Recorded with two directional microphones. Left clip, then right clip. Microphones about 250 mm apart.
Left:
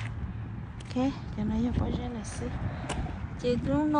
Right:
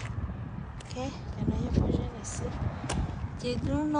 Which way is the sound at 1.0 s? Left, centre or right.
Centre.